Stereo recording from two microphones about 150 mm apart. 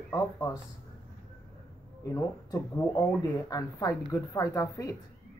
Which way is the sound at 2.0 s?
25° left (ahead or behind).